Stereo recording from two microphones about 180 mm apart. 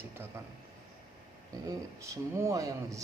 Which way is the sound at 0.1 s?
15° right (ahead or behind).